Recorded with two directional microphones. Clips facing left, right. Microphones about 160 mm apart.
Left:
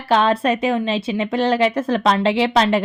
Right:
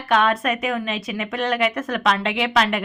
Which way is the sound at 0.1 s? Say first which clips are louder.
Left 3 dB; 30° left (ahead or behind).